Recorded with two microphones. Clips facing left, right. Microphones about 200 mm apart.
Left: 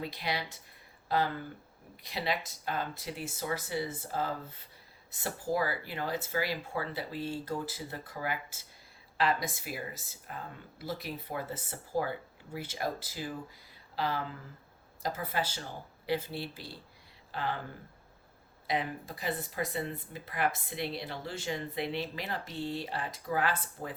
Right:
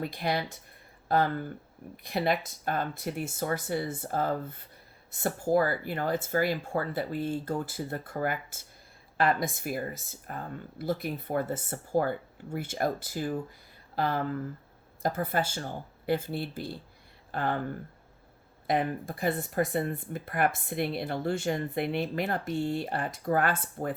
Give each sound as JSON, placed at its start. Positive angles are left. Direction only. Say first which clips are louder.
{"t": 0.0, "sound": "speech", "louder": "right 5 dB", "side_deg": -50}
{"t": 18.7, "sound": "speech", "louder": "right 5 dB", "side_deg": -50}